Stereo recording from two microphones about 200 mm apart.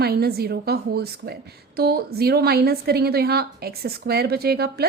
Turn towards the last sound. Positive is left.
turn(degrees=-50)  # may be behind; listen again after turning